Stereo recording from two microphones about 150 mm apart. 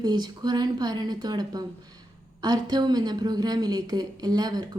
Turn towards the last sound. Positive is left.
turn(degrees=-25)  # may be behind; listen again after turning